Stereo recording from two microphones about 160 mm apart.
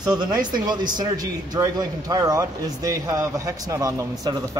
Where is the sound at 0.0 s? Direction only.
25° right (ahead or behind).